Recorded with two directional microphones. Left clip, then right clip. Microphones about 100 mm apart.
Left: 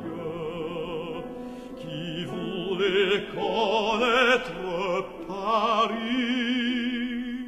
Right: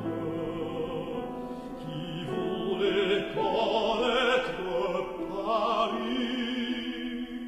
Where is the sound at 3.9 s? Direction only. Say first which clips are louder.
Left 4 dB; 55° left (ahead or behind).